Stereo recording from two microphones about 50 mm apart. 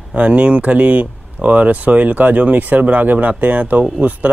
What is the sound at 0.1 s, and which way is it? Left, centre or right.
Speech, right.